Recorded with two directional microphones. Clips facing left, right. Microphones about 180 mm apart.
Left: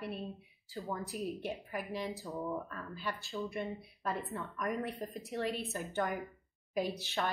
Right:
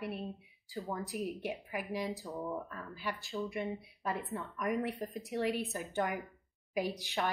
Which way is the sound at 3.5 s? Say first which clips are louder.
Right 1 dB; 15° right (ahead or behind).